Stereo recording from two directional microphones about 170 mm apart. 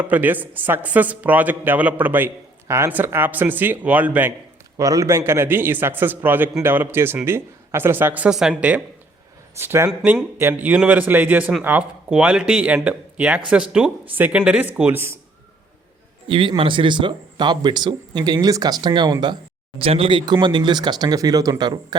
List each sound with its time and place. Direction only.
0.0 s a man's voice: 10° right (ahead or behind)
16.3 s speech: 30° right (ahead or behind)